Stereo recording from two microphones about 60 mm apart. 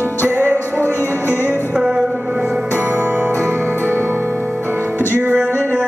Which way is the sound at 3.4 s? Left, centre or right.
Right.